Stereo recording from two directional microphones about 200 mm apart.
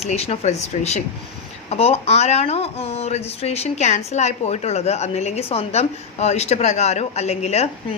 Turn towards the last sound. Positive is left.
turn(degrees=30)  # may be behind; listen again after turning